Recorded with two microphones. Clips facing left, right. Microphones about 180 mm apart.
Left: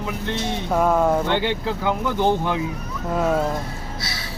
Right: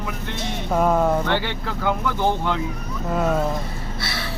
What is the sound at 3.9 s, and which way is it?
Gasp, 60° right (ahead or behind).